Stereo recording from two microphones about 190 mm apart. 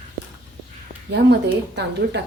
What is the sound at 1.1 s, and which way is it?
A woman's voice, 65° right (ahead or behind).